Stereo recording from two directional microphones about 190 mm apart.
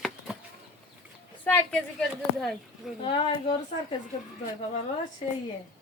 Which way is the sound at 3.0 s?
25° left (ahead or behind).